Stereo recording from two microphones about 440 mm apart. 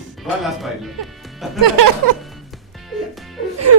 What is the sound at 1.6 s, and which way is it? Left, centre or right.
Music, right.